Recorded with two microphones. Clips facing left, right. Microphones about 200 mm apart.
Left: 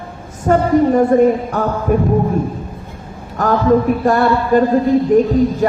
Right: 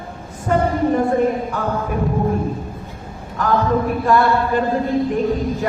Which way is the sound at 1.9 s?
50° left (ahead or behind).